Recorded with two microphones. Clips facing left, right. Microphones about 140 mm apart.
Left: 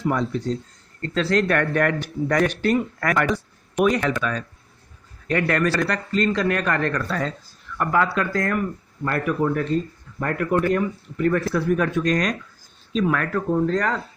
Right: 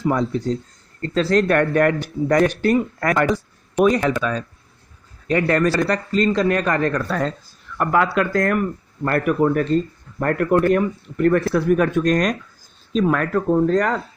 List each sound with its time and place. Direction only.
0.1 s speech: 25° right (ahead or behind)
1.0 s speech: 35° right (ahead or behind)
7.1 s speech: 55° right (ahead or behind)
12.9 s speech: 35° right (ahead or behind)
13.5 s speech: 50° right (ahead or behind)